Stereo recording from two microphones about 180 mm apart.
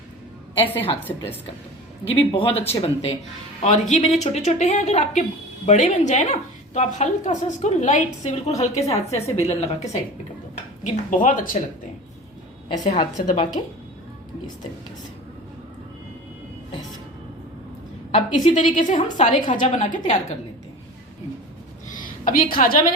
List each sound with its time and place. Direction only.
0.6 s a woman's voice: 10° left (ahead or behind)
2.3 s a woman's voice: 30° left (ahead or behind)
9.0 s a woman's voice: 15° left (ahead or behind)
9.5 s a woman's voice: 35° left (ahead or behind)
12.7 s a woman's voice: 40° left (ahead or behind)
18.5 s a woman's voice: 45° left (ahead or behind)
21.8 s a sound: 45° left (ahead or behind)